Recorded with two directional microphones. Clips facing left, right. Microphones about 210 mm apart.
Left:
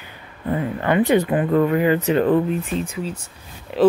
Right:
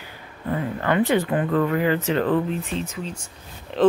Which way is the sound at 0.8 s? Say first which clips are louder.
Left 3 dB; 15° left (ahead or behind).